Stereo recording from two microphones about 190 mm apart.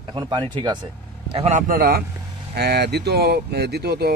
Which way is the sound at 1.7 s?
55° right (ahead or behind).